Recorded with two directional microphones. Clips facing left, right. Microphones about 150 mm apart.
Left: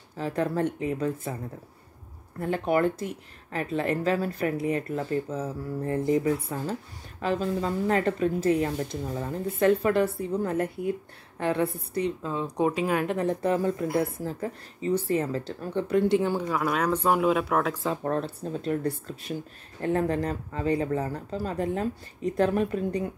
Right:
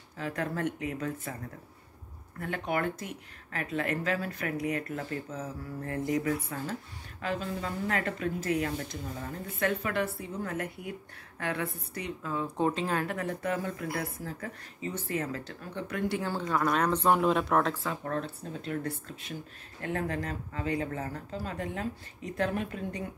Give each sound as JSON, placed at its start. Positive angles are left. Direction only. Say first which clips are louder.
{"t": 0.2, "sound": "speech", "louder": "left 6 dB", "side_deg": 30}
{"t": 2.4, "sound": "speech", "louder": "left 7 dB", "side_deg": 35}
{"t": 16.4, "sound": "speech", "louder": "left 2 dB", "side_deg": 5}
{"t": 18.0, "sound": "speech", "louder": "left 6 dB", "side_deg": 30}